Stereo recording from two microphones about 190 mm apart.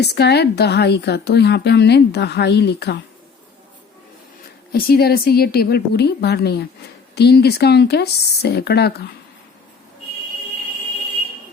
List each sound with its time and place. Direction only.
0.0 s speech: 60° left (ahead or behind)
4.7 s speech: 55° left (ahead or behind)